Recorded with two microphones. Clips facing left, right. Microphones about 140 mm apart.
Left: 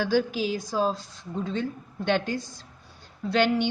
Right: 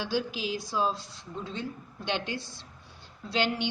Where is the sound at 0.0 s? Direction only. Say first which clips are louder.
Left 7 dB; 45° left (ahead or behind).